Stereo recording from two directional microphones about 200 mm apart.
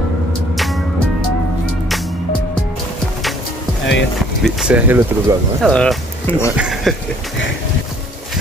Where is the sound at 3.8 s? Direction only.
65° left (ahead or behind).